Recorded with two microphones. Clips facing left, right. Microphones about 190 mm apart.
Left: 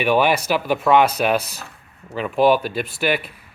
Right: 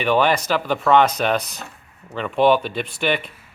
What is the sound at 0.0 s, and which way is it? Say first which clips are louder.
Speech: left 1 dB; 10° left (ahead or behind).